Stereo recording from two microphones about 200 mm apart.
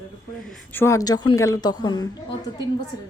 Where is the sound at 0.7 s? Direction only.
15° left (ahead or behind).